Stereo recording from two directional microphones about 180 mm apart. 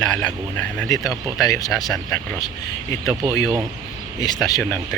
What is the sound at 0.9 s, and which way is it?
Speech, 20° left (ahead or behind).